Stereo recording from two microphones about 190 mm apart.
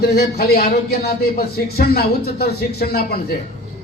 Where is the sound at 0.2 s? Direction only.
55° left (ahead or behind).